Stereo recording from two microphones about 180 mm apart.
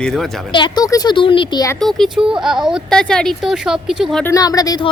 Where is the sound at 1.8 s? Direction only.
Centre (ahead or behind).